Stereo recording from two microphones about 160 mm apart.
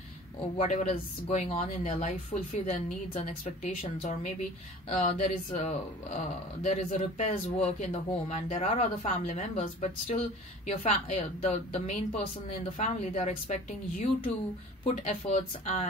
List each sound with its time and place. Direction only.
0.6 s speech: 45° left (ahead or behind)